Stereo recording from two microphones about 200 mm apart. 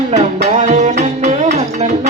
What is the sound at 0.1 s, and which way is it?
Music, 35° right (ahead or behind).